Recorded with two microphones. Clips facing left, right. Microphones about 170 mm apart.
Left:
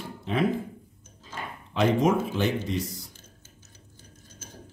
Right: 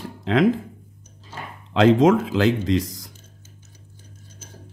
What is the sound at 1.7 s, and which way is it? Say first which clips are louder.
Speech: right 7 dB; 90° right.